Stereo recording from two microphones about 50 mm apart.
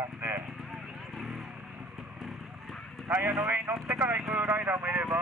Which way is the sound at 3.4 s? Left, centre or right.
Right.